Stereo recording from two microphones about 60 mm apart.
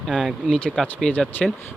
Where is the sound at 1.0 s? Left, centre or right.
Left.